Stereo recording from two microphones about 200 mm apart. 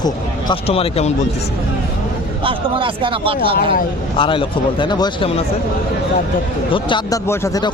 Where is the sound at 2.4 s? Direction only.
25° right (ahead or behind).